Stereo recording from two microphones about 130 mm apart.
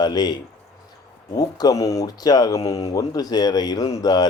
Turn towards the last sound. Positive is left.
turn(degrees=30)  # may be behind; listen again after turning